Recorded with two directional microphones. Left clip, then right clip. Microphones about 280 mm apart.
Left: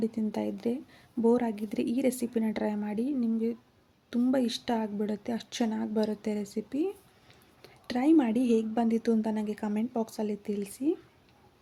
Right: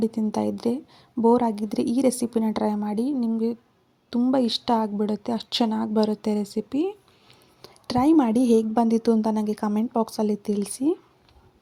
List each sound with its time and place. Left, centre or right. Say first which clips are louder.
0.0 s speech: right 7 dB; centre